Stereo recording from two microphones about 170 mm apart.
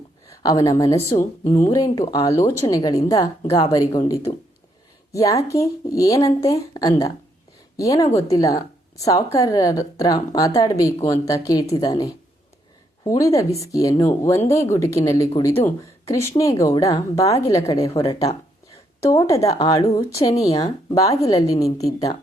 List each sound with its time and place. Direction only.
0.3 s a sound: 20° left (ahead or behind)
0.8 s speech: 20° left (ahead or behind)
19.1 s speech: 20° left (ahead or behind)